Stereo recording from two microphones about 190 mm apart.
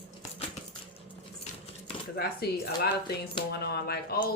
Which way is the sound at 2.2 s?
55° left (ahead or behind).